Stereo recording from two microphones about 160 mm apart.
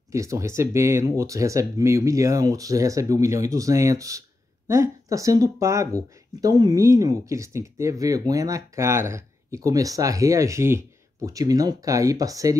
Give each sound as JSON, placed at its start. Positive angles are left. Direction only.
{"t": 0.1, "sound": "speech", "side_deg": -20}